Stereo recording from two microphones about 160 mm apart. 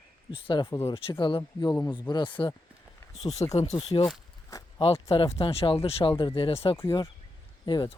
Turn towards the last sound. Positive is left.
turn(degrees=30)  # may be behind; listen again after turning